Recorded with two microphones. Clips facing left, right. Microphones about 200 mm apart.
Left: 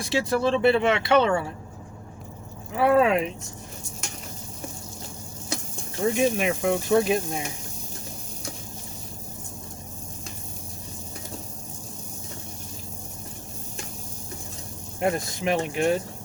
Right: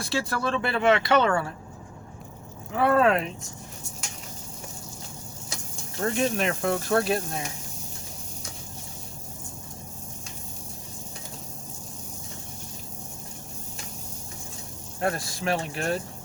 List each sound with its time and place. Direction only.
0.0 s speech: 20° left (ahead or behind)
2.7 s speech: 10° left (ahead or behind)
6.0 s speech: 10° left (ahead or behind)
15.0 s speech: 15° left (ahead or behind)